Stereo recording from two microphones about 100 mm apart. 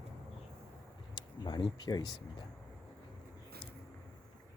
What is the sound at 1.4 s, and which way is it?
Speech, 50° left (ahead or behind).